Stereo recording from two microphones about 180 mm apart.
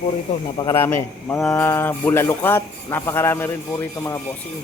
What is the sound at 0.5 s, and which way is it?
A man's voice, 15° left (ahead or behind).